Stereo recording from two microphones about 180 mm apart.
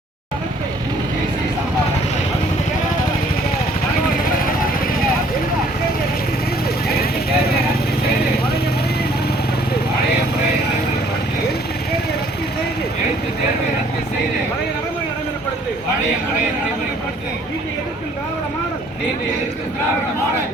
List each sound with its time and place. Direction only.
6.8 s vehicle: 60° left (ahead or behind)